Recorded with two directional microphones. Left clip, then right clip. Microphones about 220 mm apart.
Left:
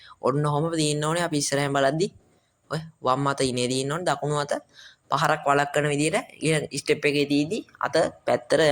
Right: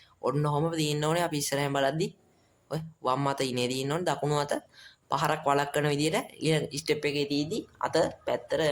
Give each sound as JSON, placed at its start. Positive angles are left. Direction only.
{"t": 0.4, "sound": "a man's voice", "side_deg": 15}
{"t": 8.3, "sound": "speech", "side_deg": 25}